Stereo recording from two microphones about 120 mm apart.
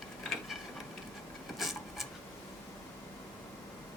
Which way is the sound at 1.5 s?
Centre (ahead or behind).